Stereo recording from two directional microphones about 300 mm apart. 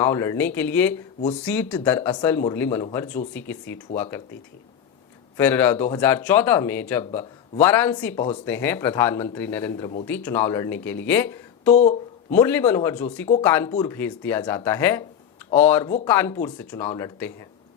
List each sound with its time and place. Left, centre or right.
0.0 s speech: centre
5.4 s speech: centre
11.7 s speech: left
12.3 s speech: centre